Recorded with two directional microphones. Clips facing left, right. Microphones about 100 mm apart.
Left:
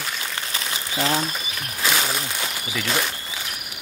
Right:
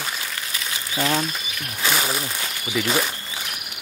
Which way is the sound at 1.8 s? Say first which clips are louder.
Even; centre (ahead or behind).